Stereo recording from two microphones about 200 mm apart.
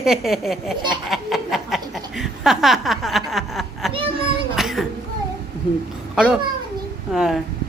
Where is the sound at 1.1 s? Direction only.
Centre (ahead or behind).